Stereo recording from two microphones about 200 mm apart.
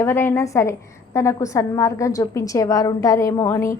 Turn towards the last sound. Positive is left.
turn(degrees=15)  # may be behind; listen again after turning